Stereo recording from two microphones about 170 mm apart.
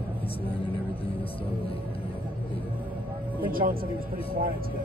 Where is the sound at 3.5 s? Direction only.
55° right (ahead or behind).